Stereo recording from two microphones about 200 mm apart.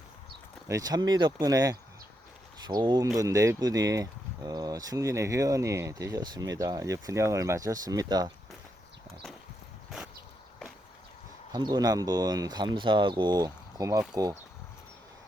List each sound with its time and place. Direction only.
0.7 s speech: 20° right (ahead or behind)
11.5 s speech: 20° right (ahead or behind)